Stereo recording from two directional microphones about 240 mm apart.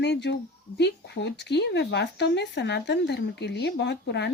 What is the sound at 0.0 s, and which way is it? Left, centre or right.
Speech, left.